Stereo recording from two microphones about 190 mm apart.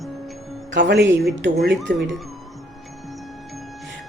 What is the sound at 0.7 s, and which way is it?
A woman's voice, 70° right (ahead or behind).